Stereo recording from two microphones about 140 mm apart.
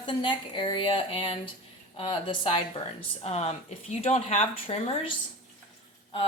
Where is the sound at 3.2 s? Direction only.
50° left (ahead or behind).